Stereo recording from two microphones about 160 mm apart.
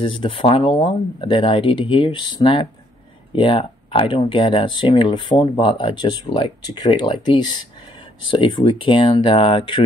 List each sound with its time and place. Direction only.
0.0 s speech: 30° left (ahead or behind)